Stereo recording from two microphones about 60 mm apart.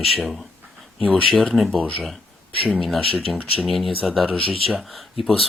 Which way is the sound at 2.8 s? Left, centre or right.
Centre.